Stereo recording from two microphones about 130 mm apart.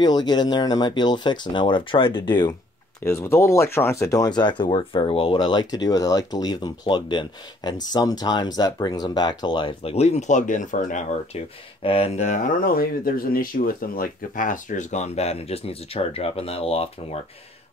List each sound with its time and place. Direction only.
0.0 s speech: 35° left (ahead or behind)
3.0 s speech: 20° left (ahead or behind); by 9.9 s 35° left (ahead or behind)
9.9 s speech: 60° left (ahead or behind); by 11.1 s 75° left (ahead or behind)
11.8 s speech: 45° left (ahead or behind)
12.3 s speech: 90° left; by 17.2 s 50° left (ahead or behind)